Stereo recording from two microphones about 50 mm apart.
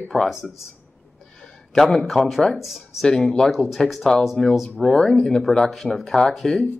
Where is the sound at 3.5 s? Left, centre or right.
Centre.